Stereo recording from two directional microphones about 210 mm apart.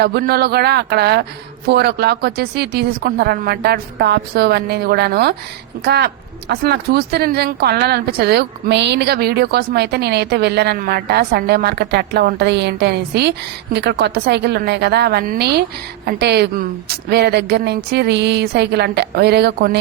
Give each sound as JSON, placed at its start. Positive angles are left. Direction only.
{"t": 0.0, "sound": "speech", "side_deg": -50}